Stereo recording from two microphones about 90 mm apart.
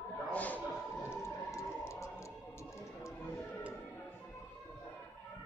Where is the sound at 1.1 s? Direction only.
30° left (ahead or behind).